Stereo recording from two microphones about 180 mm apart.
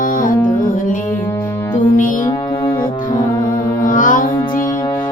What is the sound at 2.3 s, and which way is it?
Music, 25° left (ahead or behind).